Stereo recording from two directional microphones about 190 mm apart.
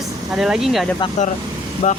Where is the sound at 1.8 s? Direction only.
40° left (ahead or behind).